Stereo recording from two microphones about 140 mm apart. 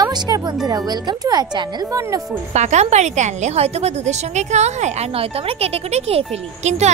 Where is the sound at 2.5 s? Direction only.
55° right (ahead or behind).